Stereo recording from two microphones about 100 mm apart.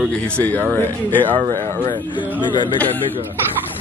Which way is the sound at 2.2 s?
50° left (ahead or behind).